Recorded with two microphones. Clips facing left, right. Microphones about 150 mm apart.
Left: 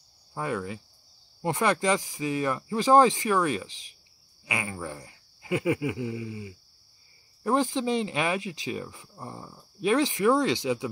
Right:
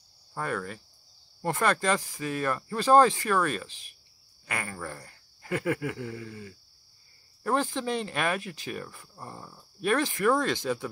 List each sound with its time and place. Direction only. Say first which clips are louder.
0.3 s speech: left 2 dB; 15° left (ahead or behind)